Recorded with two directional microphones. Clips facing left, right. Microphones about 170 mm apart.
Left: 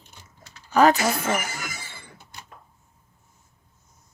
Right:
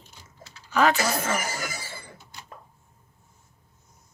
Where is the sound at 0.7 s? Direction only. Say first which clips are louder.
Left 4 dB; 40° left (ahead or behind).